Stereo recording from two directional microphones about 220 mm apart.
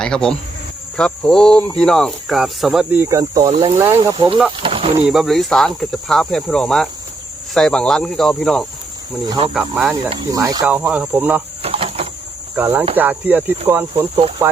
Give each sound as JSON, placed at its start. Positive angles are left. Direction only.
{"t": 0.0, "sound": "speech", "side_deg": 5}
{"t": 3.5, "sound": "speech", "side_deg": -25}
{"t": 3.8, "sound": "speech", "side_deg": -10}
{"t": 4.1, "sound": "speech", "side_deg": -25}
{"t": 5.0, "sound": "speech", "side_deg": 0}
{"t": 9.2, "sound": "speech", "side_deg": -20}
{"t": 9.5, "sound": "speech", "side_deg": 0}
{"t": 10.1, "sound": "speech", "side_deg": -20}
{"t": 11.6, "sound": "a sound", "side_deg": -25}
{"t": 12.5, "sound": "speech", "side_deg": -10}